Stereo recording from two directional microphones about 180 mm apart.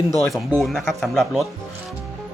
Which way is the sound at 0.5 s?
Centre (ahead or behind).